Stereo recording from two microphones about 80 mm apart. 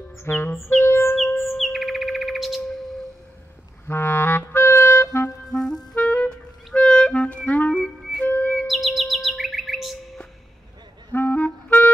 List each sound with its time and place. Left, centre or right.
0.2 s music: left
1.6 s chirp: centre
3.8 s clarinet: left
5.5 s clarinet: centre
8.2 s music: left
8.6 s chirp: centre
11.1 s clarinet: left